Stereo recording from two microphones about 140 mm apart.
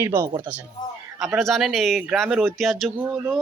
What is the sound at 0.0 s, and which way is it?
Speech, 20° right (ahead or behind).